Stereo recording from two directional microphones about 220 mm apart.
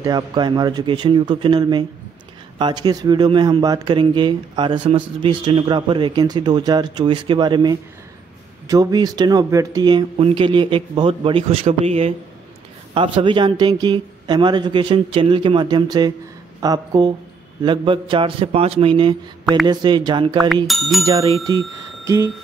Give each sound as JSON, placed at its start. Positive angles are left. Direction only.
{"t": 0.0, "sound": "speech", "side_deg": -20}
{"t": 20.6, "sound": "speech", "side_deg": 0}
{"t": 21.0, "sound": "speech", "side_deg": -15}
{"t": 21.5, "sound": "a sound", "side_deg": -15}